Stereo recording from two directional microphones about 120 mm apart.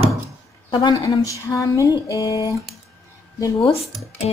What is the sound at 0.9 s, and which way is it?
A woman's voice, 30° left (ahead or behind).